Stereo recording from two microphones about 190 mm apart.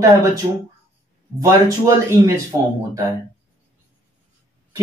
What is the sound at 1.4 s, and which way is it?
A man's voice, 15° right (ahead or behind).